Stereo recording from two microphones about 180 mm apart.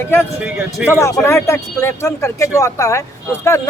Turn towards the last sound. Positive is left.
turn(degrees=15)  # may be behind; listen again after turning